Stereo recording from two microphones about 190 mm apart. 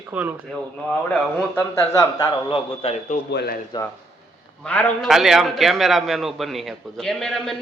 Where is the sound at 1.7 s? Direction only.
15° left (ahead or behind).